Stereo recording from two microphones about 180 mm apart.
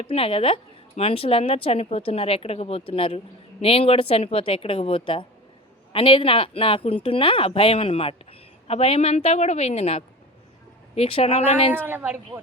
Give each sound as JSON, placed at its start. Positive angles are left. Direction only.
{"t": 0.0, "sound": "speech", "side_deg": 30}
{"t": 11.7, "sound": "speech", "side_deg": -10}